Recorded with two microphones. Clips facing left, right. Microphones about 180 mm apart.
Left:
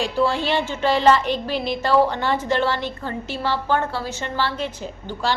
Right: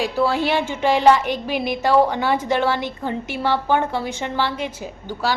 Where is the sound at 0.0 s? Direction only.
10° right (ahead or behind).